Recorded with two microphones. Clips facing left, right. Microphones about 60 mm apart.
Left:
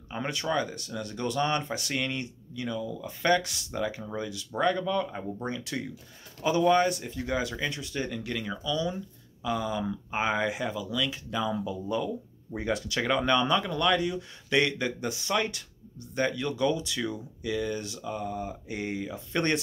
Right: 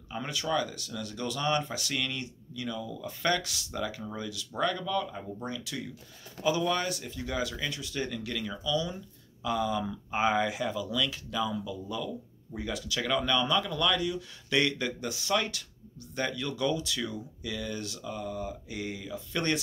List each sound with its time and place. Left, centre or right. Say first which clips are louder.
0.1 s speech: left 1 dB; left
2.8 s speech: left 1 dB; centre
5.4 s speech: left 3 dB; left
9.4 s speech: even; centre
10.8 s speech: even; centre
11.1 s speech: left 2 dB; left
14.5 s speech: left 2 dB; left